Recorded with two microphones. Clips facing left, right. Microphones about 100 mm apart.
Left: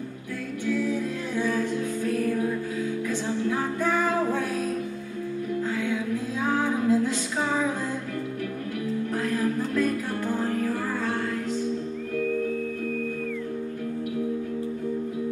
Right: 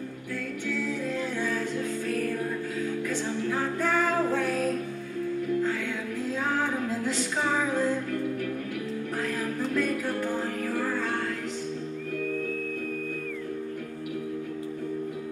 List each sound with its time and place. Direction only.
0.7 s music: 15° left (ahead or behind)
6.4 s music: 15° left (ahead or behind)
9.3 s music: 15° left (ahead or behind)